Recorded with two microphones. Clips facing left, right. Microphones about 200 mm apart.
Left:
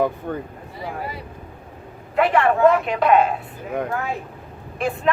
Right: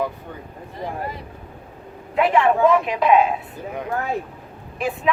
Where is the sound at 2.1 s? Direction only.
Centre (ahead or behind).